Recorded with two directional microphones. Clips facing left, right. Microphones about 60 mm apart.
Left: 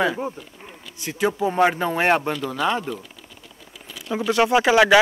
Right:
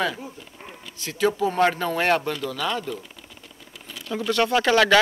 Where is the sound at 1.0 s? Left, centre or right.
Centre.